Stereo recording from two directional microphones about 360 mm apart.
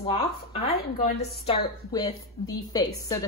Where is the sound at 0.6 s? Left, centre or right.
Left.